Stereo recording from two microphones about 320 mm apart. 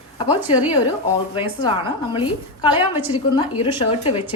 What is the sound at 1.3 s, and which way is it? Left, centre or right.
A woman's voice, centre.